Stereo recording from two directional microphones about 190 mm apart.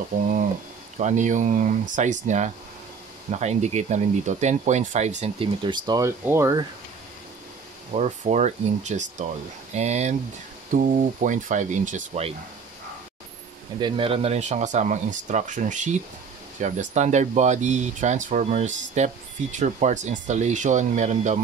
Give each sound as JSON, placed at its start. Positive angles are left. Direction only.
{"t": 0.1, "sound": "speech", "side_deg": -45}
{"t": 7.9, "sound": "speech", "side_deg": -35}
{"t": 13.7, "sound": "speech", "side_deg": -25}